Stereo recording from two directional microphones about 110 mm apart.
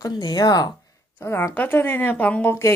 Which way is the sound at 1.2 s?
25° left (ahead or behind).